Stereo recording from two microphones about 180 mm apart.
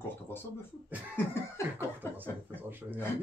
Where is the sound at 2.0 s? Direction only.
15° left (ahead or behind).